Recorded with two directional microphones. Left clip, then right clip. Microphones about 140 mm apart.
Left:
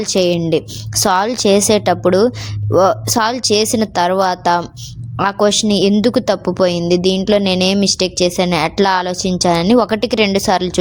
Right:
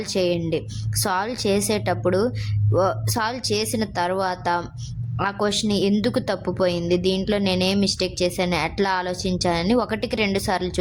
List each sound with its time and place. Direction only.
0.0 s a woman's voice: 45° left (ahead or behind)